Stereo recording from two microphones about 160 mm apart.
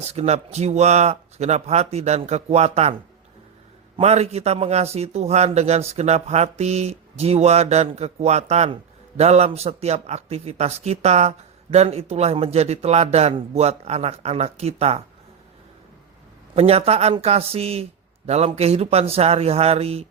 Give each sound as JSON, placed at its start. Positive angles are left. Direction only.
{"t": 0.0, "sound": "a man's voice", "side_deg": -45}
{"t": 3.9, "sound": "a man's voice", "side_deg": -40}
{"t": 16.6, "sound": "speech", "side_deg": -40}